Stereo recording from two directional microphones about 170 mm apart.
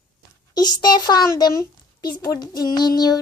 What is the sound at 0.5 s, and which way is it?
Speech, 25° left (ahead or behind).